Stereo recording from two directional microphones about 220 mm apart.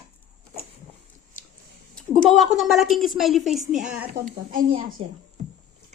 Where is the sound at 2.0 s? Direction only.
5° left (ahead or behind).